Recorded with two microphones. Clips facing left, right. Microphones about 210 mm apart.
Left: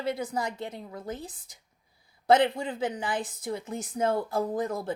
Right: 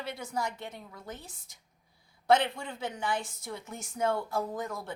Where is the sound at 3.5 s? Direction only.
35° left (ahead or behind).